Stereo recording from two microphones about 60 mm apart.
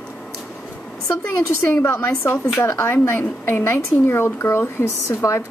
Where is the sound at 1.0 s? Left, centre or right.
Left.